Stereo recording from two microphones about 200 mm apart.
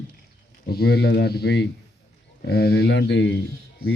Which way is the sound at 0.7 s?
50° left (ahead or behind).